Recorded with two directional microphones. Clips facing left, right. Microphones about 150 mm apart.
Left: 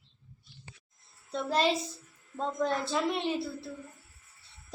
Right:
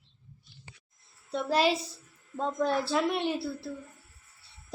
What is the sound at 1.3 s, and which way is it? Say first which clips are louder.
A woman's voice: right 2 dB; 5° right (ahead or behind).